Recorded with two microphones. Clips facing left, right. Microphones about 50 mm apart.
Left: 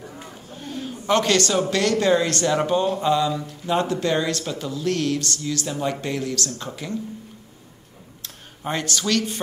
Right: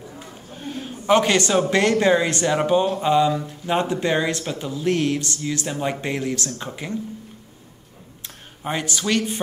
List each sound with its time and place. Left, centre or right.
0.5 s a sound: centre
1.0 s speech: centre
8.6 s speech: centre